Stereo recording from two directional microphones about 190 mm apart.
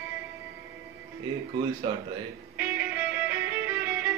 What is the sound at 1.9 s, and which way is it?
Speech, 25° right (ahead or behind).